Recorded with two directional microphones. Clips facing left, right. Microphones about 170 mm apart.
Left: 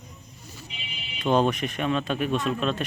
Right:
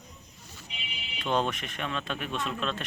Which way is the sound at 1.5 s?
10° left (ahead or behind).